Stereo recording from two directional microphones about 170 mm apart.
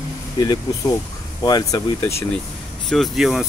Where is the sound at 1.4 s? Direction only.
20° left (ahead or behind).